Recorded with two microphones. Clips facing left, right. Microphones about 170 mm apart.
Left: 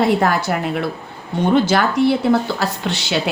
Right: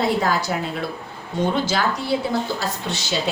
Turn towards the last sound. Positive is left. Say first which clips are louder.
# left 4 dB
turn(degrees=70)  # may be behind; listen again after turning